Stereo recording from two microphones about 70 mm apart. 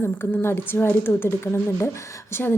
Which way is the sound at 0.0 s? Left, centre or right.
Left.